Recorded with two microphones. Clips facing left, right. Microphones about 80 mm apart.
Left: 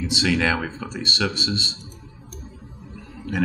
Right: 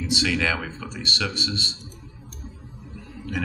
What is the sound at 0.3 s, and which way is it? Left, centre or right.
Speech, centre.